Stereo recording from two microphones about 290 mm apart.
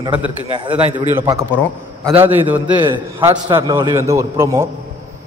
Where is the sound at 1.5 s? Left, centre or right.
Centre.